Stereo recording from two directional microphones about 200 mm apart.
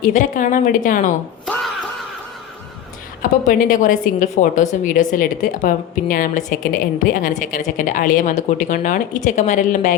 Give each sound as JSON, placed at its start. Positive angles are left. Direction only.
{"t": 0.0, "sound": "a woman's voice", "side_deg": 40}
{"t": 3.2, "sound": "a woman's voice", "side_deg": 40}